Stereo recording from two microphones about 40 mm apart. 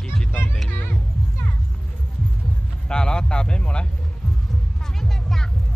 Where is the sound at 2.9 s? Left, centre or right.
Centre.